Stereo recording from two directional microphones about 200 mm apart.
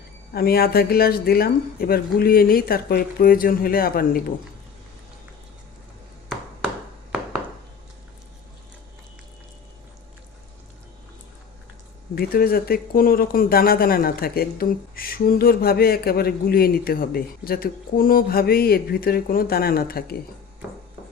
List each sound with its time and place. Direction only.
0.3 s speech: 50° left (ahead or behind)
12.1 s speech: 50° left (ahead or behind)